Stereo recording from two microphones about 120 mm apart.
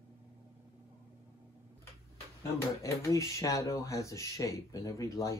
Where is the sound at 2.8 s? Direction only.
25° left (ahead or behind).